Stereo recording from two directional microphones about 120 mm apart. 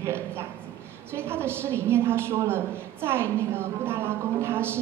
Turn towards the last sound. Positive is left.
turn(degrees=-20)  # may be behind; listen again after turning